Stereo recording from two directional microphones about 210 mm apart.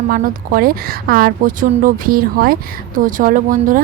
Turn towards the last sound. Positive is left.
turn(degrees=-40)  # may be behind; listen again after turning